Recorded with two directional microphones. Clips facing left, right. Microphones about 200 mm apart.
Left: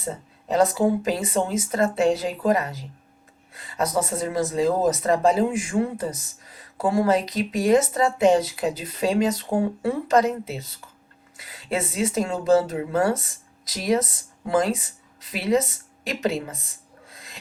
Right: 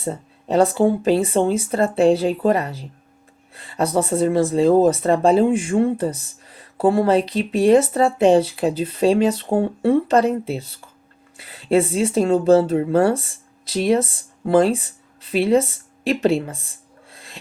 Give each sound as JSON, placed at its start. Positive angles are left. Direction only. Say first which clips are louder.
{"t": 0.0, "sound": "speech", "louder": "right 5 dB", "side_deg": -30}